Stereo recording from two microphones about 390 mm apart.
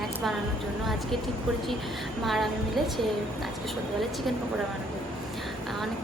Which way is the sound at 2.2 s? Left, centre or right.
Centre.